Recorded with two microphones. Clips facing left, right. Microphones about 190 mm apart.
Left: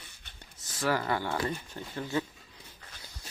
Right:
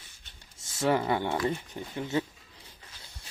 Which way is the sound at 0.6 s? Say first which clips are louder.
Right 4 dB; 25° right (ahead or behind).